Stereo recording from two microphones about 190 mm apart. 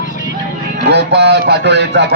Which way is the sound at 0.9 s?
65° right (ahead or behind).